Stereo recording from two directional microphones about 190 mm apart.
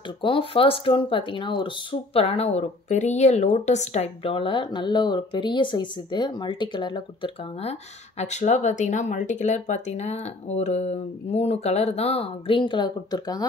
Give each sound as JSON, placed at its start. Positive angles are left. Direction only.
{"t": 0.2, "sound": "speech", "side_deg": 30}
{"t": 8.2, "sound": "speech", "side_deg": 35}